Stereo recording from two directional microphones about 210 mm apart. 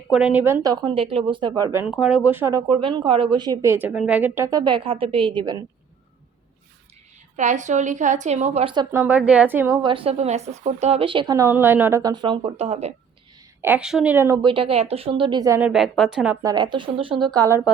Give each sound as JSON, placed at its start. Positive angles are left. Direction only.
{"t": 0.1, "sound": "speech", "side_deg": -5}
{"t": 7.3, "sound": "a woman's voice", "side_deg": -35}
{"t": 9.8, "sound": "speech", "side_deg": -25}
{"t": 13.6, "sound": "speech", "side_deg": -5}
{"t": 14.4, "sound": "speech", "side_deg": -25}
{"t": 15.7, "sound": "speech", "side_deg": 0}
{"t": 16.4, "sound": "speech", "side_deg": -20}